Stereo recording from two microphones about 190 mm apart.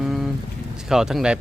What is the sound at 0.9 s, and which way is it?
Speech, centre (ahead or behind).